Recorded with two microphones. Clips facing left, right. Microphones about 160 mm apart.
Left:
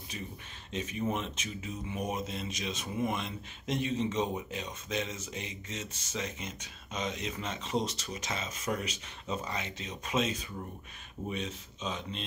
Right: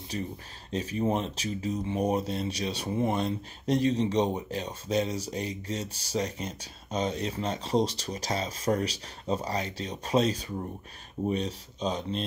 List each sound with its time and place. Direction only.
0.1 s speech: 40° right (ahead or behind)